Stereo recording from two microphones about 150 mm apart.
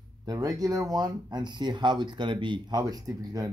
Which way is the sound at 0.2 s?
25° right (ahead or behind).